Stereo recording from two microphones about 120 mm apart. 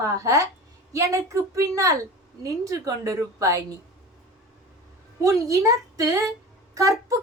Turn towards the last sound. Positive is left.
turn(degrees=-25)  # may be behind; listen again after turning